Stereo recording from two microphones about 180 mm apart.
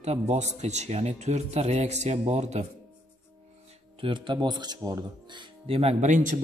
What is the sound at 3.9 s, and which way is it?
A man's voice, 30° right (ahead or behind).